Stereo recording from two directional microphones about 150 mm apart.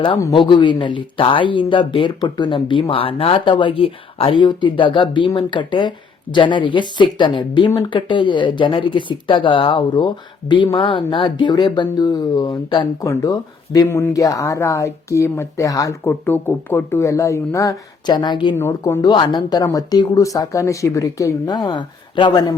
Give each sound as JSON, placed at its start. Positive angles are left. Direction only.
{"t": 0.3, "sound": "speech", "side_deg": 30}
{"t": 18.5, "sound": "speech", "side_deg": 20}